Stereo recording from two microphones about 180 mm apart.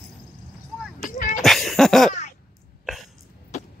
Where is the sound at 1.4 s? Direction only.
Centre (ahead or behind).